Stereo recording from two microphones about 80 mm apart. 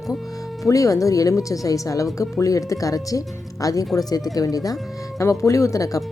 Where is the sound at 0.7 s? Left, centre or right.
Left.